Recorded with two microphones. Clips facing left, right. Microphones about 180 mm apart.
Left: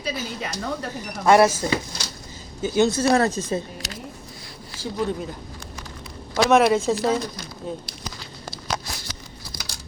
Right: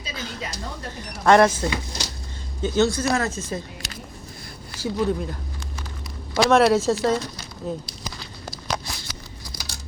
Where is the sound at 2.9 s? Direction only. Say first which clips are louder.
Left 4 dB; 30° left (ahead or behind).